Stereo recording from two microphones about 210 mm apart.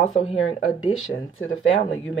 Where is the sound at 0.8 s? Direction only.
70° left (ahead or behind).